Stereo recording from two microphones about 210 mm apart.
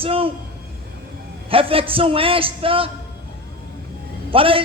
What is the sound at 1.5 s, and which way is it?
A man's voice, 25° right (ahead or behind).